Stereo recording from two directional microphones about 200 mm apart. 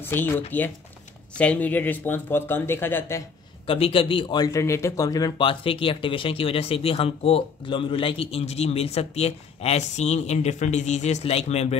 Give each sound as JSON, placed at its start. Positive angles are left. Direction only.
{"t": 0.0, "sound": "speech", "side_deg": 10}
{"t": 3.6, "sound": "speech", "side_deg": 30}